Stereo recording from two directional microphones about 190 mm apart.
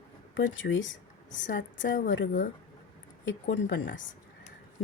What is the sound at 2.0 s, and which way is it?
Speech, 75° left (ahead or behind).